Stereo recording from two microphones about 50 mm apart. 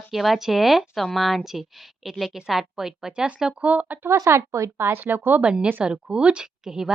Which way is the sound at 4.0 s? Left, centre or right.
Right.